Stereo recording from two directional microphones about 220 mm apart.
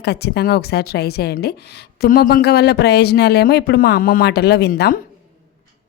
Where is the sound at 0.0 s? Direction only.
45° left (ahead or behind).